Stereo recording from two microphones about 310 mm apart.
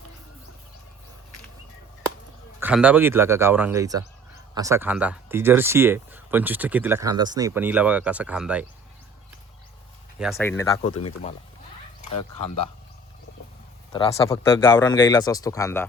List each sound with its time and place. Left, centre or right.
2.6 s speech: centre
10.2 s speech: centre
11.2 s speech: centre
13.9 s speech: centre